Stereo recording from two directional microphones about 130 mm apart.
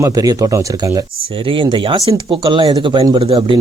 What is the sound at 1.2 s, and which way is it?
Speech, 40° right (ahead or behind).